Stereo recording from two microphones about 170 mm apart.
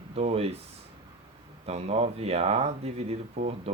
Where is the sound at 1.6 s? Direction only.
35° right (ahead or behind).